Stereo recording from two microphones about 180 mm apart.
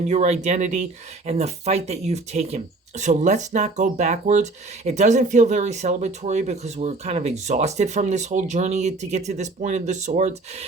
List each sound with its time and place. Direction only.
0.1 s speech: 40° right (ahead or behind)